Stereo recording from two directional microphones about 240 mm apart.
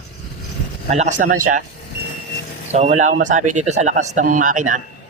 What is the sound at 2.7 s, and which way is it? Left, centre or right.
A man's voice, right.